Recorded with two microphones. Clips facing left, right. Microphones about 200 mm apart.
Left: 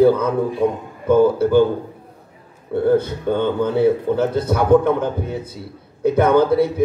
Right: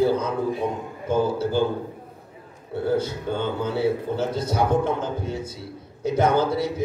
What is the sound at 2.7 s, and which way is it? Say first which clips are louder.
A man's voice: left 7 dB; 55° left (ahead or behind).